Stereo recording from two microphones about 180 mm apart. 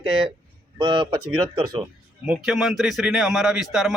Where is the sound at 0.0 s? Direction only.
30° right (ahead or behind).